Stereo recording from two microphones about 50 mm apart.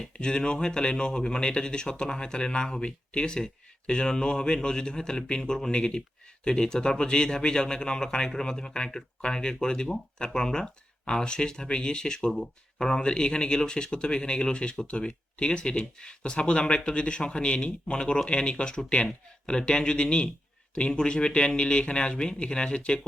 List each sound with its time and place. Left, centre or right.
0.0 s speech: centre